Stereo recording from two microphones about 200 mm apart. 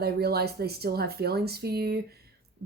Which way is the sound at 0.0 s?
50° right (ahead or behind).